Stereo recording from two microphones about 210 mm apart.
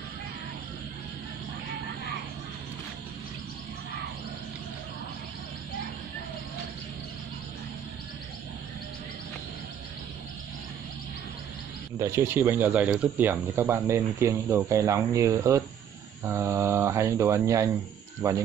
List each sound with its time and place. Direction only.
12.0 s speech: 10° right (ahead or behind)